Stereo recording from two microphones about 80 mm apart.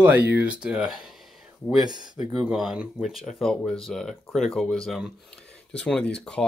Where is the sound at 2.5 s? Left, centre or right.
Centre.